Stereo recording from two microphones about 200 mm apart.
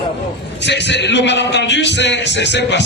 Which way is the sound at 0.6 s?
60° left (ahead or behind).